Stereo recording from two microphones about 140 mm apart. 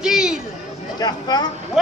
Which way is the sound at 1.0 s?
30° left (ahead or behind).